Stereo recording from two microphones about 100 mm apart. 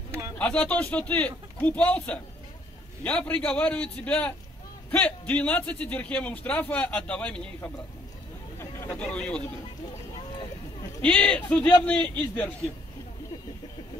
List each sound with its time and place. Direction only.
0.4 s a man's voice: 10° left (ahead or behind)
8.5 s vehicle: 25° left (ahead or behind)
8.9 s a man's voice: 10° left (ahead or behind)
11.0 s a man's voice: 10° left (ahead or behind)